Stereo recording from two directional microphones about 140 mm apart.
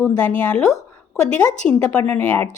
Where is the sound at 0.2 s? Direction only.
10° left (ahead or behind).